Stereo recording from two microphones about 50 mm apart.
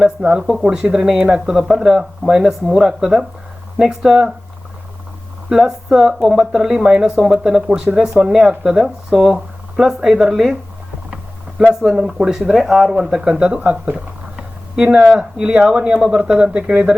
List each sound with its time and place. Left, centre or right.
0.3 s speech: centre
0.8 s speech: centre
5.5 s speech: centre
11.7 s speech: centre